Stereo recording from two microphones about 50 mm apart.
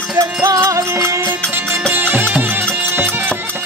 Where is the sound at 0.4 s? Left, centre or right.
Right.